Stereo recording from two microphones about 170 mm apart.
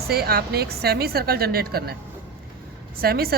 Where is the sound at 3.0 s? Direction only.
65° right (ahead or behind).